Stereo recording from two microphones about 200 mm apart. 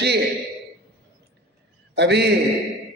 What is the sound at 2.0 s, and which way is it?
Music, 55° right (ahead or behind).